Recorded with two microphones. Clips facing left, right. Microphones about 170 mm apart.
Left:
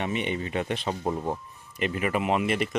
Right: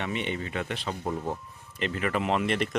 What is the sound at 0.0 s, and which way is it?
Speech, 15° left (ahead or behind).